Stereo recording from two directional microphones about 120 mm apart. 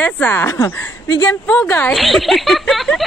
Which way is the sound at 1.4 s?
10° left (ahead or behind).